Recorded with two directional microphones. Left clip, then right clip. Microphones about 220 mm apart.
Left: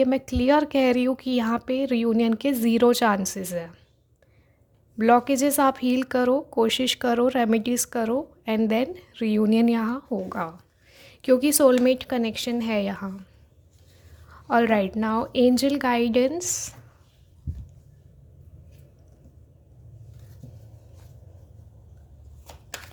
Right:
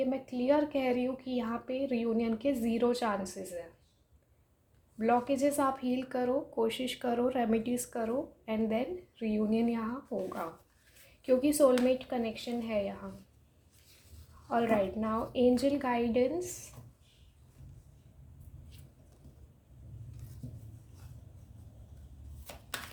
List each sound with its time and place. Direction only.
0.0 s speech: 50° left (ahead or behind)
4.9 s speech: 50° left (ahead or behind)
14.5 s speech: 50° left (ahead or behind)